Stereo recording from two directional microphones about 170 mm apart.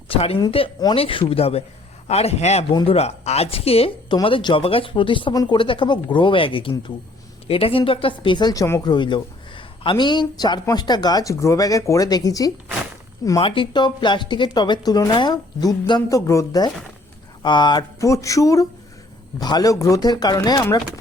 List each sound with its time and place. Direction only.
0.1 s speech: 35° left (ahead or behind)